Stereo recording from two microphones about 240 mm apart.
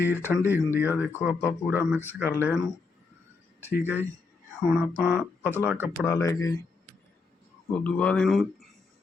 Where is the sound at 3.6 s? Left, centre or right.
Centre.